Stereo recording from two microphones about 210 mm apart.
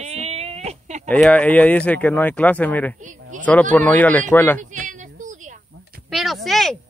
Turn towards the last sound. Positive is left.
turn(degrees=0)  # may be behind; listen again after turning